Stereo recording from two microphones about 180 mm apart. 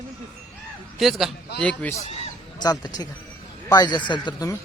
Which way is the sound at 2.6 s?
20° left (ahead or behind).